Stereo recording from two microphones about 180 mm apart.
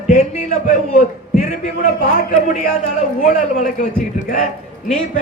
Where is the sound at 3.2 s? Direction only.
40° left (ahead or behind).